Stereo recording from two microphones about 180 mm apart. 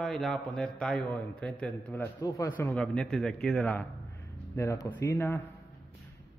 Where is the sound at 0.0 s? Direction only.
Centre (ahead or behind).